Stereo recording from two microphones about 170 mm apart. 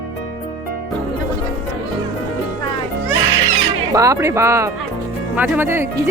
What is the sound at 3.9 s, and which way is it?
Speech, 20° right (ahead or behind).